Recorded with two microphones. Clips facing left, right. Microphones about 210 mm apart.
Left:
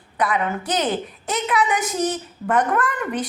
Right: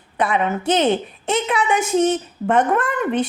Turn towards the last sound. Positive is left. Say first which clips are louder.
# right 4 dB
turn(degrees=-25)  # may be behind; listen again after turning